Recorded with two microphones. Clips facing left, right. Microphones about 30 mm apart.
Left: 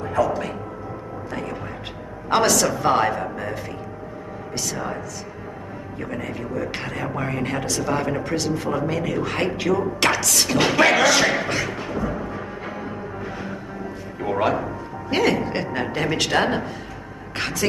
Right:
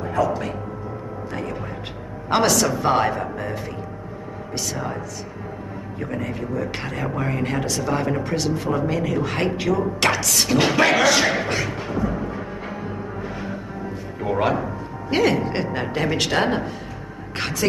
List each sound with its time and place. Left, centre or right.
0.1 s speech: centre
2.2 s speech: centre
4.6 s speech: centre
6.2 s speech: centre
7.1 s speech: centre
15.0 s speech: centre